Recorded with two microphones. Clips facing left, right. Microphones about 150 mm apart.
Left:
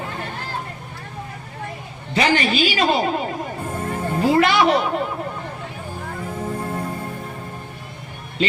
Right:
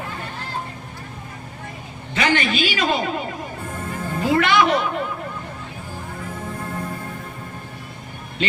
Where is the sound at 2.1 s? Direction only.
35° left (ahead or behind).